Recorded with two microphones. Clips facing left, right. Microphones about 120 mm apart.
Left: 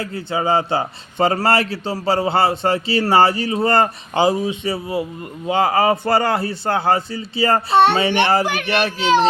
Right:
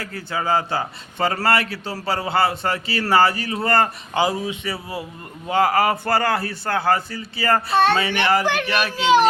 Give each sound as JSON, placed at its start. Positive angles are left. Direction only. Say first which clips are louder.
{"t": 0.0, "sound": "a man's voice", "louder": "left 4 dB", "side_deg": 20}